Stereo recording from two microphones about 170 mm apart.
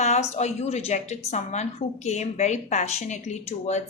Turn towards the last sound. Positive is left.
turn(degrees=45)  # may be behind; listen again after turning